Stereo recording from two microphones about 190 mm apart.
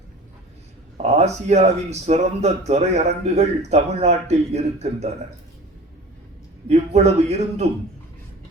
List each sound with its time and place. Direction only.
0.9 s speech: 35° right (ahead or behind)
6.7 s speech: 35° right (ahead or behind)